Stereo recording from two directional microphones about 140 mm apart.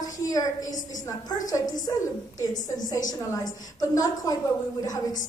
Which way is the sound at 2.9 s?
25° left (ahead or behind).